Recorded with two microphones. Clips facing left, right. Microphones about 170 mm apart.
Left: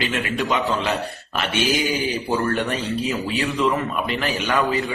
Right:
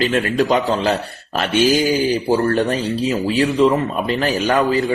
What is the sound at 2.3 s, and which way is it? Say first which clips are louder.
Speech: right 4 dB; 30° right (ahead or behind).